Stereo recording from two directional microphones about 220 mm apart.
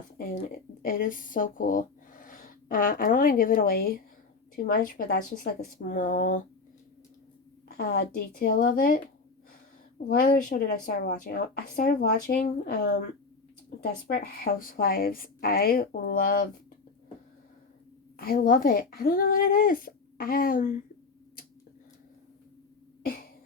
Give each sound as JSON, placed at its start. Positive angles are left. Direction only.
{"t": 0.3, "sound": "a woman's voice", "side_deg": 40}
{"t": 7.8, "sound": "a woman's voice", "side_deg": 45}
{"t": 10.1, "sound": "a woman's voice", "side_deg": 40}
{"t": 18.2, "sound": "a woman's voice", "side_deg": 40}